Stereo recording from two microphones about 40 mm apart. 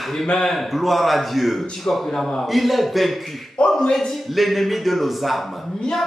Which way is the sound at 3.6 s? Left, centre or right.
Left.